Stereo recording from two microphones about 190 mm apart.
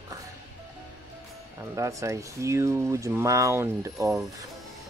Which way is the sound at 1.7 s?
15° right (ahead or behind).